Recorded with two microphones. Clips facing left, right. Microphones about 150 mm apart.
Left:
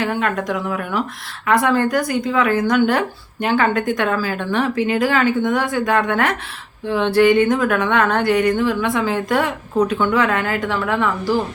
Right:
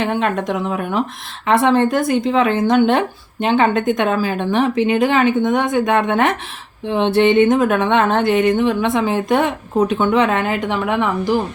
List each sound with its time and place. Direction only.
0.0 s speech: 20° right (ahead or behind)